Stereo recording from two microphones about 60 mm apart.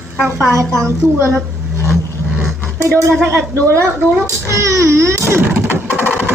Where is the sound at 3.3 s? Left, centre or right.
Right.